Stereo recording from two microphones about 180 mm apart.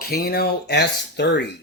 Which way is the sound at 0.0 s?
60° left (ahead or behind).